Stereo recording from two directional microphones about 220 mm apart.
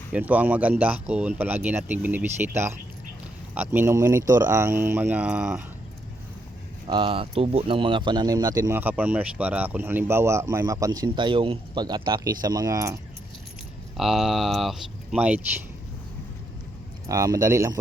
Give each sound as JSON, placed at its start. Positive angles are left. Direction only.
{"t": 0.1, "sound": "speech", "side_deg": -5}
{"t": 6.8, "sound": "speech", "side_deg": -25}
{"t": 13.9, "sound": "speech", "side_deg": 0}
{"t": 17.1, "sound": "speech", "side_deg": -15}